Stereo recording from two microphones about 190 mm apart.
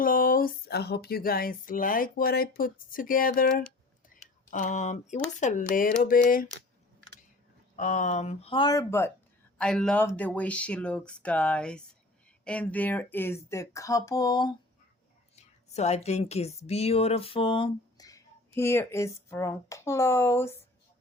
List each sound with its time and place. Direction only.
0.0 s a sound: 50° left (ahead or behind)
7.8 s speech: 40° left (ahead or behind); by 14.5 s 20° left (ahead or behind)
15.4 s speech: 35° left (ahead or behind); by 20.6 s 15° left (ahead or behind)